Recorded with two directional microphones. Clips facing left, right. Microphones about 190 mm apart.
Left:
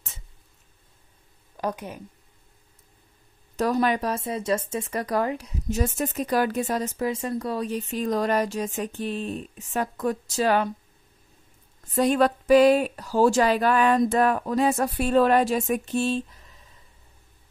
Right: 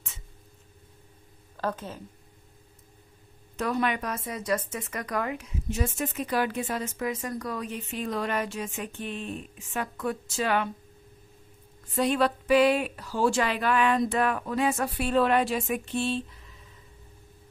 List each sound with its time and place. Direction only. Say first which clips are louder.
1.6 s speech: left 2 dB; 15° left (ahead or behind)
3.5 s a woman's voice: left 5 dB; 40° left (ahead or behind)
11.9 s a woman's voice: left 4 dB; 45° left (ahead or behind)